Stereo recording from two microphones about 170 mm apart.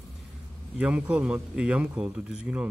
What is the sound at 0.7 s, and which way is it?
A man's voice, 5° right (ahead or behind).